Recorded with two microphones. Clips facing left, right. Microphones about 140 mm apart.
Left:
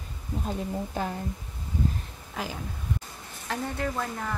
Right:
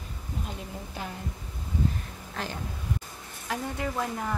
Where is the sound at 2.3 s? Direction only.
5° left (ahead or behind).